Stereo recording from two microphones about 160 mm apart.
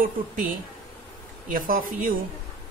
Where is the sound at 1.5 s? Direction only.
60° right (ahead or behind).